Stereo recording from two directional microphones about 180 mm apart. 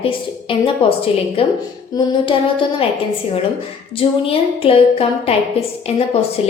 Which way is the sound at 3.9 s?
30° left (ahead or behind).